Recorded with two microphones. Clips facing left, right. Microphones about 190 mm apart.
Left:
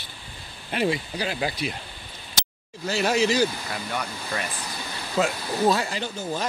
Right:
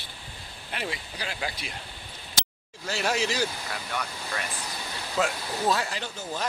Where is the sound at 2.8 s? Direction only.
5° left (ahead or behind).